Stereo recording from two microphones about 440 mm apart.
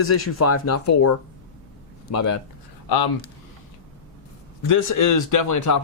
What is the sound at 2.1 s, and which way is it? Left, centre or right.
Speech, left.